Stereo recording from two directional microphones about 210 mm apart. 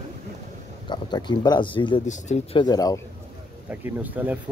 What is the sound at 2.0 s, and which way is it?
Speech, 35° left (ahead or behind).